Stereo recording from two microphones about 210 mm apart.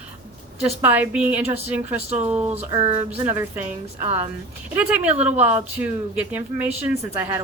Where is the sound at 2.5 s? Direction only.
30° right (ahead or behind).